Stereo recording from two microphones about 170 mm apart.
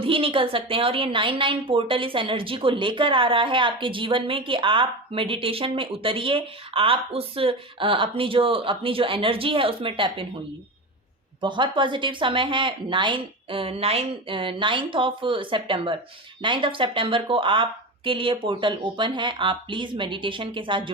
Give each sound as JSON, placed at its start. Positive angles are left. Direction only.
{"t": 0.0, "sound": "a woman's voice", "side_deg": -30}
{"t": 11.3, "sound": "a woman's voice", "side_deg": -30}